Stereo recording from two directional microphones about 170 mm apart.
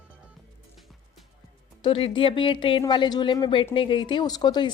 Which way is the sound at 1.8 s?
30° left (ahead or behind).